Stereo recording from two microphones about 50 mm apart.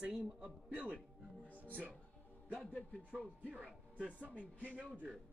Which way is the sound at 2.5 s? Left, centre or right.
Left.